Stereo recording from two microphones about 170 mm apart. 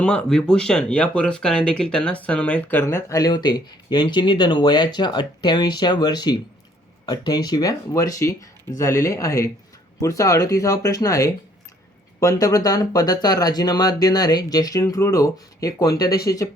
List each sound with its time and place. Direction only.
0.0 s speech: 5° left (ahead or behind)